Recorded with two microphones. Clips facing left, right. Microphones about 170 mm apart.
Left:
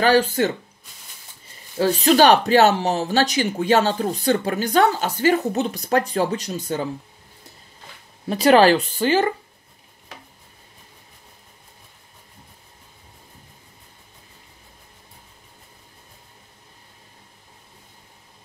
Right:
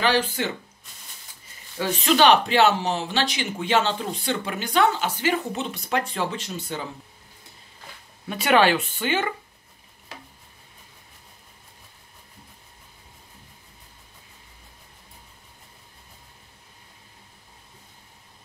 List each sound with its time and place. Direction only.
0.0 s speech: 45° left (ahead or behind)
1.8 s speech: 40° left (ahead or behind)
8.3 s speech: 35° left (ahead or behind)